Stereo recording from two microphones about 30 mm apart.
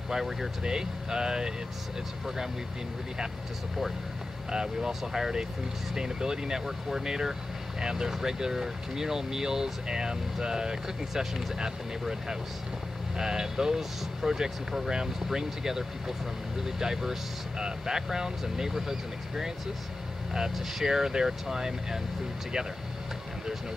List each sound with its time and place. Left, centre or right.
0.1 s speech: centre
0.7 s speech: right
4.5 s speech: right
13.2 s speech: right
20.8 s speech: centre